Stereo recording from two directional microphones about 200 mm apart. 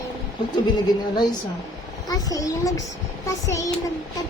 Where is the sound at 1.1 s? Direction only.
20° left (ahead or behind).